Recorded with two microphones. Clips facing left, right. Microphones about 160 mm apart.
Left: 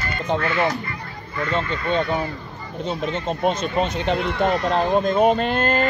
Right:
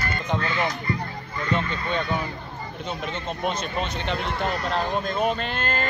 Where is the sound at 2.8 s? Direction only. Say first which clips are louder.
Left 7 dB; 40° left (ahead or behind).